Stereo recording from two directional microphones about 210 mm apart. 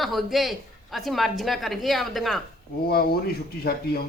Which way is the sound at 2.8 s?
45° left (ahead or behind).